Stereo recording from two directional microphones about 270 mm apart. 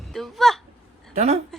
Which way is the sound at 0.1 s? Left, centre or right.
Centre.